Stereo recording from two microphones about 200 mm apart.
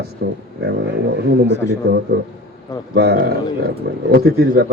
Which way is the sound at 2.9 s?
55° right (ahead or behind).